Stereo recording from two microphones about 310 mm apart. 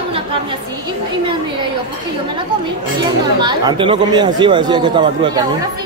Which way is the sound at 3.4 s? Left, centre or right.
Centre.